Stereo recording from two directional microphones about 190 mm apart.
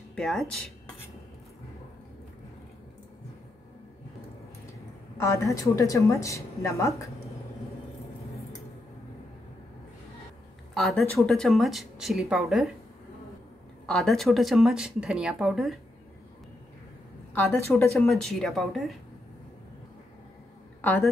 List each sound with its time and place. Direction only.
0.1 s speech: centre (ahead or behind)
5.1 s a woman's voice: 15° left (ahead or behind)
10.7 s speech: centre (ahead or behind)
13.8 s speech: centre (ahead or behind)
17.3 s speech: 10° left (ahead or behind)
20.8 s a woman's voice: 10° left (ahead or behind)